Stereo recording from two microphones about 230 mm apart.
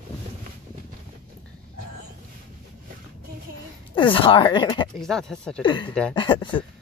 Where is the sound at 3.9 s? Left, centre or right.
Left.